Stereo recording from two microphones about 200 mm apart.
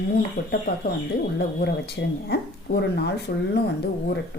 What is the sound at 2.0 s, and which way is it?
Speech, 65° left (ahead or behind).